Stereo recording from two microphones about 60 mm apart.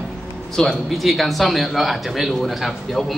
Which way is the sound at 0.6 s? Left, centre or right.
Centre.